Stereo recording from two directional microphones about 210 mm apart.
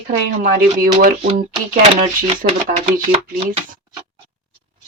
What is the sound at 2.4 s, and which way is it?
Speech, 40° right (ahead or behind).